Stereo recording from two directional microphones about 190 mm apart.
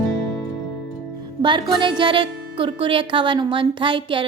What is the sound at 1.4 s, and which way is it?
Music, 25° right (ahead or behind).